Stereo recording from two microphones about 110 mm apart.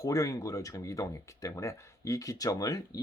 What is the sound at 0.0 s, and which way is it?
Speech, 30° left (ahead or behind).